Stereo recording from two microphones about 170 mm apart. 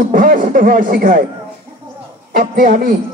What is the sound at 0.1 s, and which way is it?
A man's voice, 50° right (ahead or behind).